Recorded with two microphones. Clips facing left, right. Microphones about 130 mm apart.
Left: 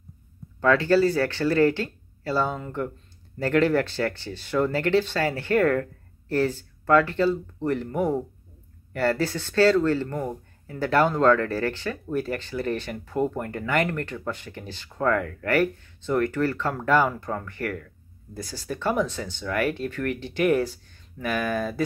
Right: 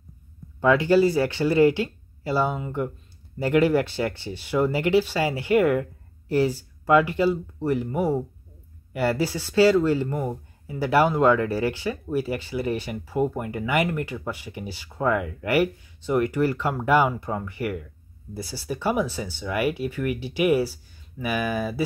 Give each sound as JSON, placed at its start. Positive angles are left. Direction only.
{"t": 0.6, "sound": "speech", "side_deg": -15}